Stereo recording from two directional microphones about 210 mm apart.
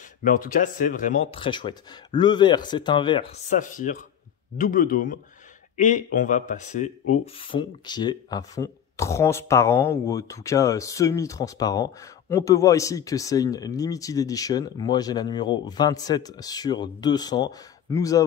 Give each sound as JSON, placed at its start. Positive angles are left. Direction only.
{"t": 0.2, "sound": "speech", "side_deg": 40}
{"t": 3.4, "sound": "speech", "side_deg": 40}
{"t": 7.8, "sound": "speech", "side_deg": 20}